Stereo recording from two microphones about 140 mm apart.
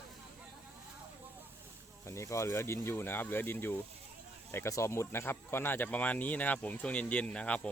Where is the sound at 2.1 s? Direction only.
20° left (ahead or behind).